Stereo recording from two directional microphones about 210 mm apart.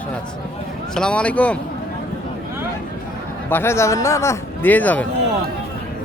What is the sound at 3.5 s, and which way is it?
A man's voice, 10° left (ahead or behind).